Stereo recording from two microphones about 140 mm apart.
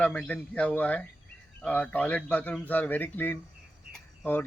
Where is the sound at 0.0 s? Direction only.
10° left (ahead or behind).